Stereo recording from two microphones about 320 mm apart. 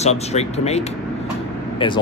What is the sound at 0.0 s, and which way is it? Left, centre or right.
Speech, centre.